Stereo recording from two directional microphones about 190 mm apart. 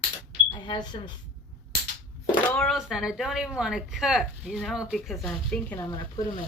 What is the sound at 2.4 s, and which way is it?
Speech, centre (ahead or behind).